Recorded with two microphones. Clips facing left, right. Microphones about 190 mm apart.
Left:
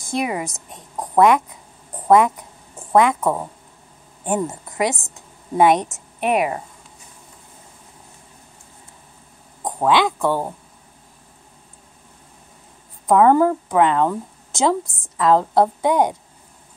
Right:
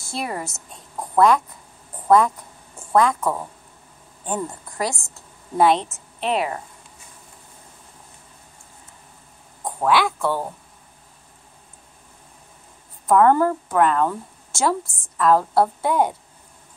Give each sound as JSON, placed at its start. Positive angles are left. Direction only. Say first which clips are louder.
{"t": 0.0, "sound": "a woman's voice", "louder": "left 5 dB", "side_deg": 15}
{"t": 9.7, "sound": "speech", "louder": "left 2 dB", "side_deg": 20}
{"t": 13.0, "sound": "speech", "louder": "left 2 dB", "side_deg": 15}